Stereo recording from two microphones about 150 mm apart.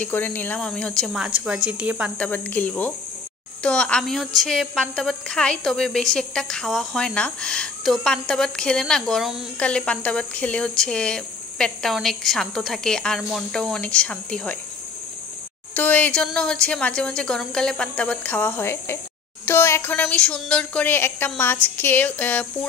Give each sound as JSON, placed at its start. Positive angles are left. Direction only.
{"t": 0.0, "sound": "a woman's voice", "side_deg": 10}
{"t": 2.1, "sound": "a woman's voice", "side_deg": 10}
{"t": 15.7, "sound": "a woman's voice", "side_deg": 10}